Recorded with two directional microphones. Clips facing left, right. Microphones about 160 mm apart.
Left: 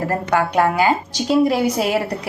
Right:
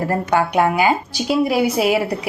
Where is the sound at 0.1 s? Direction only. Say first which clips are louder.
Right 1 dB; 15° right (ahead or behind).